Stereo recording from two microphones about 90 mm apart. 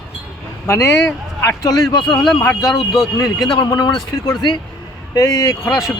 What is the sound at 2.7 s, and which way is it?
Speech, centre (ahead or behind).